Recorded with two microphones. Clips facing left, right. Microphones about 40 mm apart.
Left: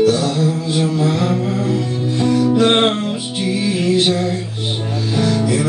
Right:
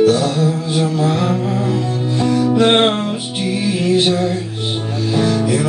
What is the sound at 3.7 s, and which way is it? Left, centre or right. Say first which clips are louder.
Music: right 1 dB; right.